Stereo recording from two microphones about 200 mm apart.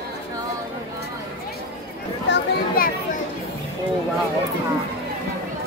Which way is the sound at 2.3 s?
45° left (ahead or behind).